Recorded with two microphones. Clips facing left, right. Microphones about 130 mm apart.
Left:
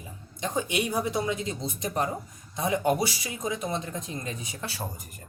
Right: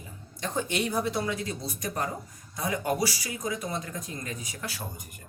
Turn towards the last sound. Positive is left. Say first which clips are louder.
# left 2 dB
turn(degrees=30)  # may be behind; listen again after turning